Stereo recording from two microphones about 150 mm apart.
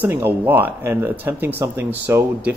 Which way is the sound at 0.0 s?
10° right (ahead or behind).